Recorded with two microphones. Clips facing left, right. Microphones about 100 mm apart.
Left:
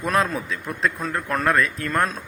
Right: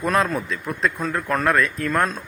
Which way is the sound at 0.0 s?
Centre (ahead or behind).